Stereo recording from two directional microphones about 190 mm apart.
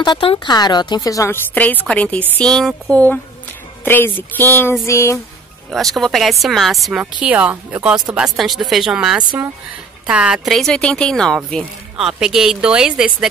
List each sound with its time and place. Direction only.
0.0 s speech: 25° left (ahead or behind)
5.7 s speech: centre (ahead or behind)